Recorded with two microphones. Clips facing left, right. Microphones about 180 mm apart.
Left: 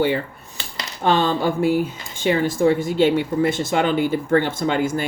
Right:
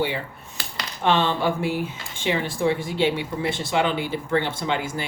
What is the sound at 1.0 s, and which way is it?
Speech, 40° left (ahead or behind).